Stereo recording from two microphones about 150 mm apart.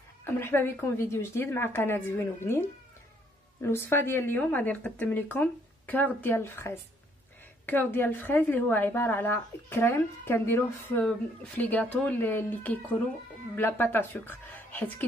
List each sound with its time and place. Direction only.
0.2 s a woman's voice: 15° left (ahead or behind)
3.6 s a woman's voice: 15° left (ahead or behind)